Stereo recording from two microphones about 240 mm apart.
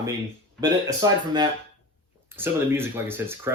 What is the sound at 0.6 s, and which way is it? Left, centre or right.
Speech, centre.